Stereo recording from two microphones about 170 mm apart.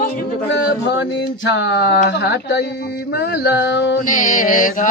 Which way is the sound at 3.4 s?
80° left.